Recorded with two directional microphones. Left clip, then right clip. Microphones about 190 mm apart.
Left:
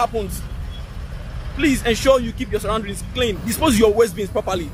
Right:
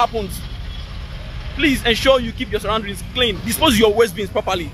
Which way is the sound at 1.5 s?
15° left (ahead or behind).